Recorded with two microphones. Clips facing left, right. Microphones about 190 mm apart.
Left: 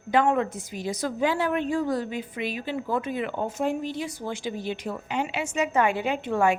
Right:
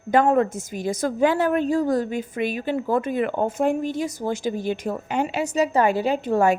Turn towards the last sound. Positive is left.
turn(degrees=-40)  # may be behind; listen again after turning